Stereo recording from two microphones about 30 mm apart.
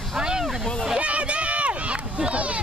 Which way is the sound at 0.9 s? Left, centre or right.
Right.